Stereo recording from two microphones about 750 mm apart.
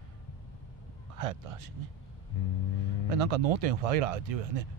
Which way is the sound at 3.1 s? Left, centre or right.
Right.